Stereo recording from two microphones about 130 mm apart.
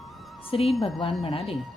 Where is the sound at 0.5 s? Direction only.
45° left (ahead or behind).